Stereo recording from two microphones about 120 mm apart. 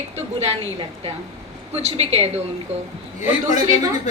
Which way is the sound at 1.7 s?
60° right (ahead or behind).